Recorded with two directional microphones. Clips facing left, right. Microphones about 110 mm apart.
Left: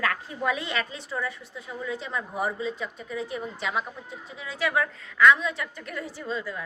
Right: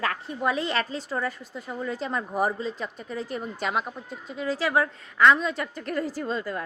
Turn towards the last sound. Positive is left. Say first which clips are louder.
# right 3 dB
turn(degrees=-50)  # may be behind; listen again after turning